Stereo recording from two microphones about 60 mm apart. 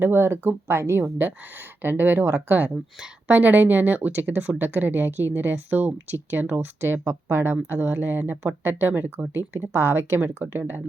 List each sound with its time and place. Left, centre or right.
0.0 s speech: right
7.8 s speech: right